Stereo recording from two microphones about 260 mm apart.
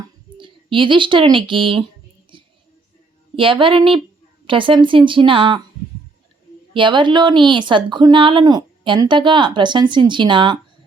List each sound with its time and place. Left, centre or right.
0.3 s speech: centre
2.3 s a sound: centre
3.3 s speech: centre
6.7 s speech: centre